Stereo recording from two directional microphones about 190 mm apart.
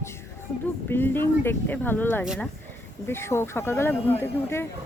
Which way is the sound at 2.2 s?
Centre (ahead or behind).